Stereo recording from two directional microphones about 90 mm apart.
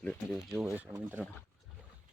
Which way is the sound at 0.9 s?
45° right (ahead or behind).